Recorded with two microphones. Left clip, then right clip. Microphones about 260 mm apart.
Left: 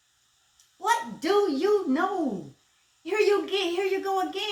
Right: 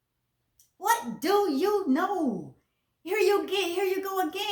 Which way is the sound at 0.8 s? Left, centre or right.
Right.